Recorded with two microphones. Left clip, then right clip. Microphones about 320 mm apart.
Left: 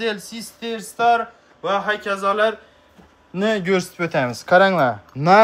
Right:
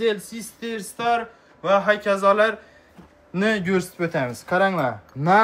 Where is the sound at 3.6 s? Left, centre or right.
Left.